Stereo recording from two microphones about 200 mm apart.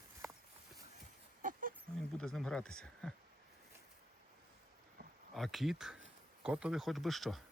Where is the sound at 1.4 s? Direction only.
40° right (ahead or behind).